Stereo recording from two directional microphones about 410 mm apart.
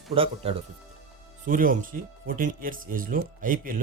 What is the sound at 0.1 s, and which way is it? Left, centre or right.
Speech, centre.